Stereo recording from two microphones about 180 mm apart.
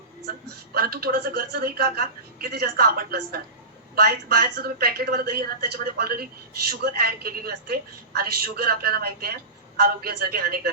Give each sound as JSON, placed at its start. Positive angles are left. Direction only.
{"t": 0.3, "sound": "a woman's voice", "side_deg": -60}